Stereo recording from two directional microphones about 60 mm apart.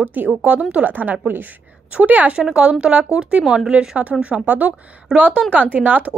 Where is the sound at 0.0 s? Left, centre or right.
Right.